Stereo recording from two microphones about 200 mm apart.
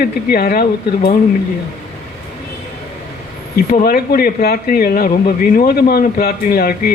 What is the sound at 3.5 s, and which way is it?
Speech, 50° left (ahead or behind).